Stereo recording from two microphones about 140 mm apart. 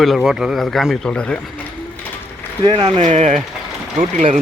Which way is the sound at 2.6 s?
35° right (ahead or behind).